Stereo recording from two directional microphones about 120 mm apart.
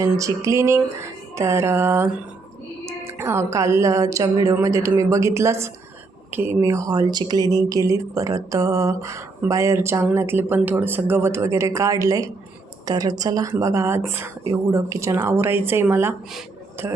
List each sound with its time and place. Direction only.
0.0 s speech: 25° right (ahead or behind)